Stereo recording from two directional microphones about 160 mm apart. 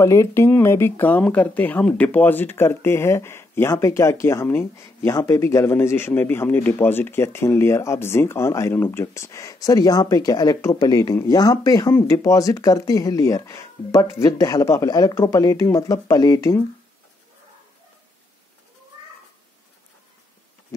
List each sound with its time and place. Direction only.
0.0 s speech: 20° left (ahead or behind)